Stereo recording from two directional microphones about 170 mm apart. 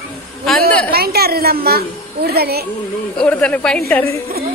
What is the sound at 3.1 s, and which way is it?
Speech, 5° left (ahead or behind).